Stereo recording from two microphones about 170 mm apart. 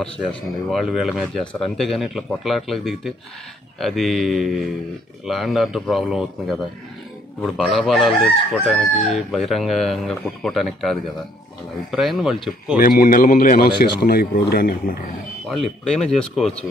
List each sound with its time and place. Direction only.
0.7 s chicken: centre (ahead or behind)
7.6 s chicken: centre (ahead or behind)
12.7 s a man's voice: 55° left (ahead or behind)
15.5 s chicken: centre (ahead or behind)